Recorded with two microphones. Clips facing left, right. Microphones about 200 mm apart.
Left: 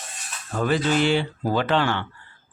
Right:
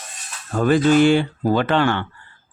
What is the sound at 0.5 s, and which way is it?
Speech, 50° right (ahead or behind).